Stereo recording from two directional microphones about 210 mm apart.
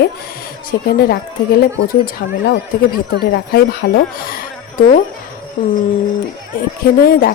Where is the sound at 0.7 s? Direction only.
45° left (ahead or behind).